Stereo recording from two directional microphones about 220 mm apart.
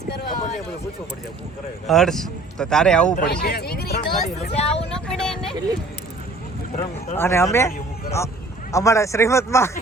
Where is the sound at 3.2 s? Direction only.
45° left (ahead or behind).